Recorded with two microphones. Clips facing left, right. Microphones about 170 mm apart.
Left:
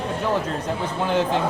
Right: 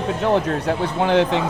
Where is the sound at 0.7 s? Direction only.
75° right (ahead or behind).